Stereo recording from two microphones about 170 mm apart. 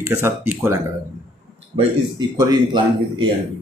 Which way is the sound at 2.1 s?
25° right (ahead or behind).